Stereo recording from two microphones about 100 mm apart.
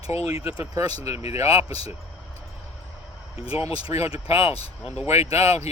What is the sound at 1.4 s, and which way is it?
Speech, 90° left.